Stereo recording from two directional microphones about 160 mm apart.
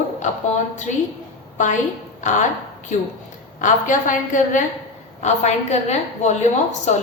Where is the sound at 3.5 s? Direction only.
50° left (ahead or behind).